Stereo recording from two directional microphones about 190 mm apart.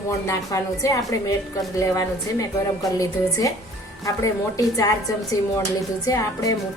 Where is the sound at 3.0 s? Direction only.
15° left (ahead or behind).